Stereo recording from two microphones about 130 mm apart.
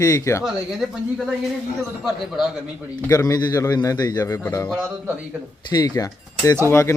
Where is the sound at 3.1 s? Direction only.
25° left (ahead or behind).